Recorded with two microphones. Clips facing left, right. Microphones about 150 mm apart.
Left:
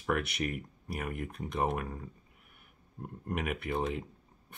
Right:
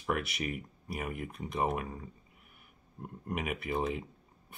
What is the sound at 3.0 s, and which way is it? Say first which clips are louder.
Speech: left 1 dB; 5° right (ahead or behind).